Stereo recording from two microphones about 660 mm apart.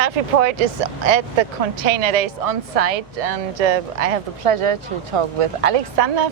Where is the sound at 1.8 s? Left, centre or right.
Right.